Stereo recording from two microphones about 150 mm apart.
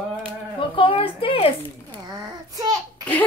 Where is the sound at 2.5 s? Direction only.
25° right (ahead or behind).